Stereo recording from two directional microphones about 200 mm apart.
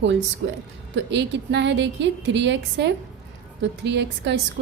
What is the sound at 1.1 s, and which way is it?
A woman's voice, 60° right (ahead or behind).